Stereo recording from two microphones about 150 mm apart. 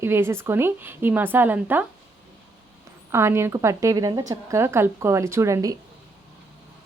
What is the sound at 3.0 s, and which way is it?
A woman's voice, 15° right (ahead or behind).